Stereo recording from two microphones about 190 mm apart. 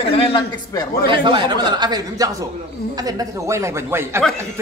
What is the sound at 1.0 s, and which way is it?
Speech, 25° right (ahead or behind).